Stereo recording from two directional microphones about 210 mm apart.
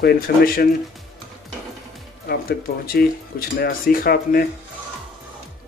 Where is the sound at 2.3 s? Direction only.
50° left (ahead or behind).